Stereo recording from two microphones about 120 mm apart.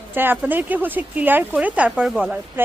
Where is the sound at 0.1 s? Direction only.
15° right (ahead or behind).